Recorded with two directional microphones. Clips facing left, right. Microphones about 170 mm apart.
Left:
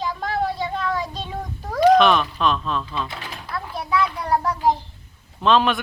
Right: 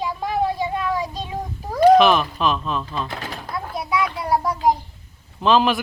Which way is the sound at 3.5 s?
45° right (ahead or behind).